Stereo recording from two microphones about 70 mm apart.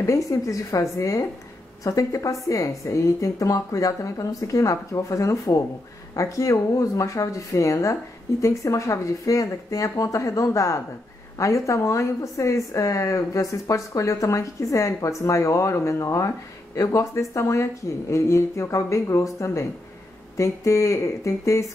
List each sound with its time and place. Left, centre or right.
0.0 s a woman's voice: left